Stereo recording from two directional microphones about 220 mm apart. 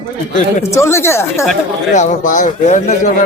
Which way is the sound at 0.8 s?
10° left (ahead or behind).